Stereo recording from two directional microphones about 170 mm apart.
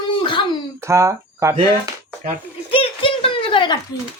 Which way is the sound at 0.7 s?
15° right (ahead or behind).